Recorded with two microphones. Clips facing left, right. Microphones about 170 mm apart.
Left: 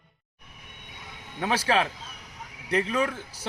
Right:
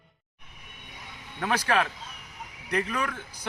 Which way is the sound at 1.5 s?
25° left (ahead or behind).